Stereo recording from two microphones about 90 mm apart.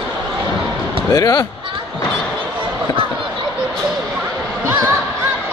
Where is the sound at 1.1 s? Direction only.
45° left (ahead or behind).